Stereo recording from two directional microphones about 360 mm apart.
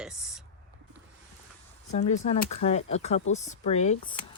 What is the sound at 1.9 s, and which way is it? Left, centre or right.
Speech, centre.